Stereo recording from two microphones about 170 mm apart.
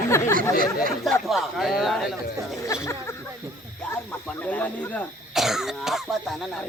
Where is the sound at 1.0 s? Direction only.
Centre (ahead or behind).